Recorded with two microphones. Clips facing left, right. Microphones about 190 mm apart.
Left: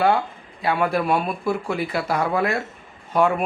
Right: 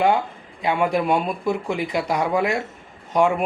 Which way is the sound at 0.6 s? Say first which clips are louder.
Right 1 dB; 20° right (ahead or behind).